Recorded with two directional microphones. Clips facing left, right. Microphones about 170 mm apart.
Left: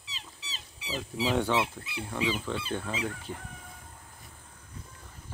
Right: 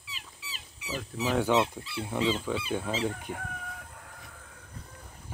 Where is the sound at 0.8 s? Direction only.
15° left (ahead or behind).